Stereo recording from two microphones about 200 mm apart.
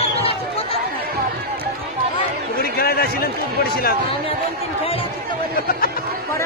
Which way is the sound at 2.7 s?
50° left (ahead or behind).